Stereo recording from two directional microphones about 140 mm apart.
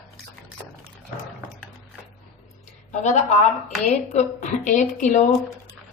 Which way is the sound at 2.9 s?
55° left (ahead or behind).